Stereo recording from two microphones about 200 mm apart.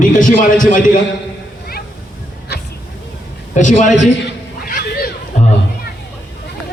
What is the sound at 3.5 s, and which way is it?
Speech, 40° left (ahead or behind).